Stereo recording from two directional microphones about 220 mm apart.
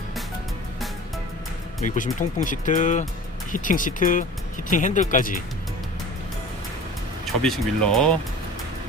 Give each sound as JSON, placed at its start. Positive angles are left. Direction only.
{"t": 1.8, "sound": "speech", "side_deg": 35}
{"t": 7.4, "sound": "speech", "side_deg": 5}